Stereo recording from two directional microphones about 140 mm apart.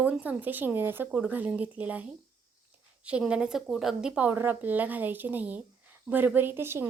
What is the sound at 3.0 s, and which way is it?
A woman's voice, 5° right (ahead or behind).